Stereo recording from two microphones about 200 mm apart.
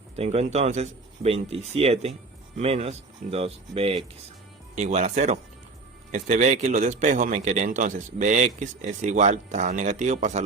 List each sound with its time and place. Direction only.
0.2 s a man's voice: 30° right (ahead or behind)